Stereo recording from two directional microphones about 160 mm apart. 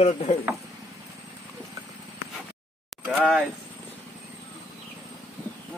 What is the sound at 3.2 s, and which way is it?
Speech, 5° left (ahead or behind).